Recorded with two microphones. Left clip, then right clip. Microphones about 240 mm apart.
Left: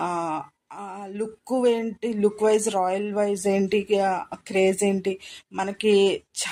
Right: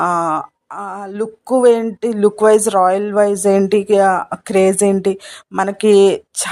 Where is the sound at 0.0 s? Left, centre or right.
Right.